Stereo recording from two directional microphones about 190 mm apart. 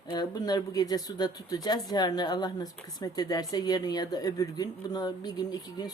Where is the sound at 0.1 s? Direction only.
20° left (ahead or behind).